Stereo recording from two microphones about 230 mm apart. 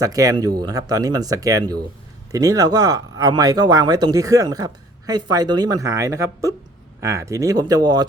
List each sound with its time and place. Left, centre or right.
0.0 s speech: centre